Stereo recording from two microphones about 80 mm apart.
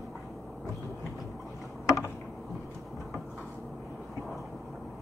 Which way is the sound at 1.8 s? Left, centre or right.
Left.